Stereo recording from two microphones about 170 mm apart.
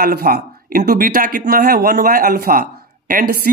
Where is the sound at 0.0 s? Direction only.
65° right (ahead or behind).